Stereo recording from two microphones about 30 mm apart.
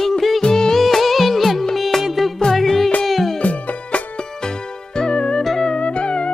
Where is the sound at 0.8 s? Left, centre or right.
Centre.